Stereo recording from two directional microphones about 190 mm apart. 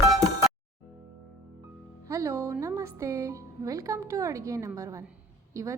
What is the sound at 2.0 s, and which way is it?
Music, 15° right (ahead or behind).